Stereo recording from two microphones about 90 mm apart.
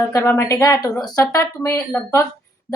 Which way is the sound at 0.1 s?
30° left (ahead or behind).